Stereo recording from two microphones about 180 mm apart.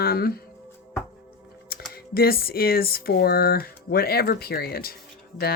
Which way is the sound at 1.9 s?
55° left (ahead or behind).